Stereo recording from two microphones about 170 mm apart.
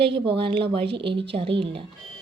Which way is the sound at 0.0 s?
30° right (ahead or behind).